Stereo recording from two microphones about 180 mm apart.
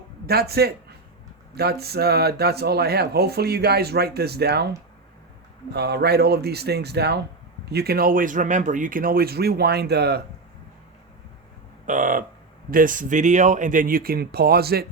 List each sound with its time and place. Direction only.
0.3 s a man's voice: 60° right (ahead or behind)
5.7 s speech: 65° right (ahead or behind)
11.9 s speech: 45° right (ahead or behind)